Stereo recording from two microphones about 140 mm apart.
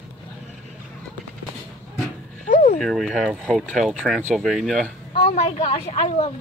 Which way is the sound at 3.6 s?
10° left (ahead or behind).